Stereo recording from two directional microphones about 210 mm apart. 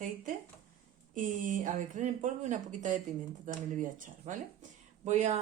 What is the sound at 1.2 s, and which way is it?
Speech, 40° right (ahead or behind).